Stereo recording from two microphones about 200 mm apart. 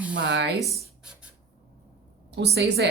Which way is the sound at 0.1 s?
65° right (ahead or behind).